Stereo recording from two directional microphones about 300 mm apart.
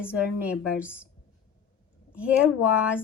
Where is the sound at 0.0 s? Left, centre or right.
Centre.